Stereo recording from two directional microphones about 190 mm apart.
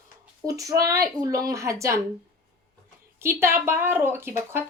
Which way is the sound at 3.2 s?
10° right (ahead or behind).